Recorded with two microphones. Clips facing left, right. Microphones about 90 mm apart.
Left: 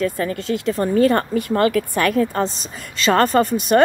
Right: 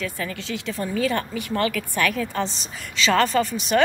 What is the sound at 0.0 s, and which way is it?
A woman's voice, 40° left (ahead or behind).